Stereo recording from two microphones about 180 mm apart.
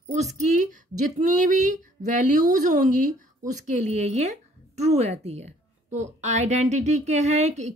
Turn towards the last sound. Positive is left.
turn(degrees=-40)  # may be behind; listen again after turning